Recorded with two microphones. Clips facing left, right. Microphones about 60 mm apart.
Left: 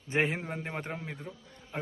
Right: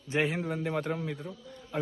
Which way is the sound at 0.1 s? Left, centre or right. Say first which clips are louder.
Right 1 dB; left.